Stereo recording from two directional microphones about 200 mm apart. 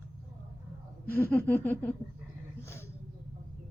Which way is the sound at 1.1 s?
10° left (ahead or behind).